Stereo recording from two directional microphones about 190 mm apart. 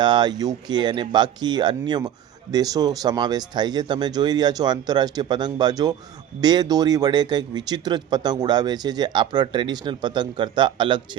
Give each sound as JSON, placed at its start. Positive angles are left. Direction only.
{"t": 0.0, "sound": "speech", "side_deg": -25}